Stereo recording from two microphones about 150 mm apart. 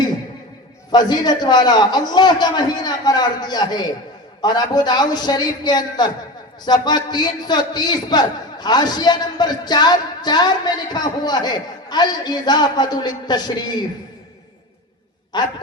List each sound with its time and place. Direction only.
0.9 s a man's voice: 30° left (ahead or behind)
15.3 s a man's voice: 30° left (ahead or behind)